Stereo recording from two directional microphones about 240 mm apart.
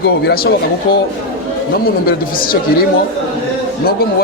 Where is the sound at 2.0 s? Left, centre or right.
Left.